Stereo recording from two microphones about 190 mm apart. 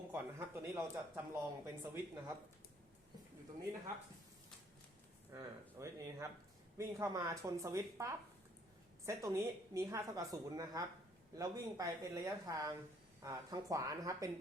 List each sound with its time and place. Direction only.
0.1 s speech: 10° right (ahead or behind)
5.3 s speech: 15° right (ahead or behind)